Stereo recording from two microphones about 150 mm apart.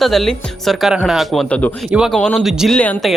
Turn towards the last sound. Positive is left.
turn(degrees=5)  # may be behind; listen again after turning